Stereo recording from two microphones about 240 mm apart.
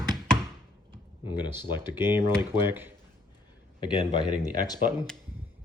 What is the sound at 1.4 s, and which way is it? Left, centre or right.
Speech, centre.